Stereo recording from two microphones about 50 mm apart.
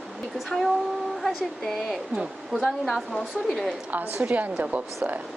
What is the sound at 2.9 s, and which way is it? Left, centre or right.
Speech, centre.